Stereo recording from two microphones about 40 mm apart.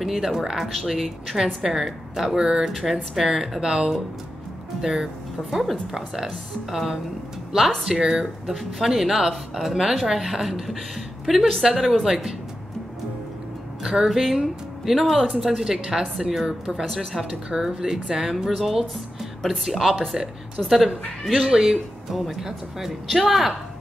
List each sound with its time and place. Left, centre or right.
0.0 s speech: centre
2.4 s speech: centre
2.7 s speech: centre
13.8 s speech: centre
16.9 s speech: centre
17.2 s speech: centre